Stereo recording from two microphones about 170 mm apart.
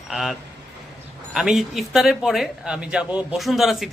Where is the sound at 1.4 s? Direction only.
Centre (ahead or behind).